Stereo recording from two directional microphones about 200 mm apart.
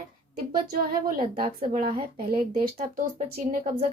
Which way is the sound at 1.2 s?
25° right (ahead or behind).